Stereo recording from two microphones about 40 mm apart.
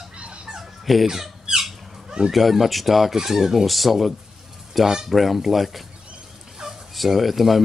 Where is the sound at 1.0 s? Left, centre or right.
Centre.